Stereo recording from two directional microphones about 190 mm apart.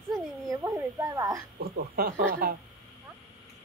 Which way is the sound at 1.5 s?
55° right (ahead or behind).